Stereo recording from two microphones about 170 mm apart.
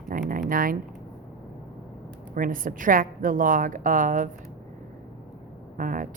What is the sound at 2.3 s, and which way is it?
Speech, 55° right (ahead or behind).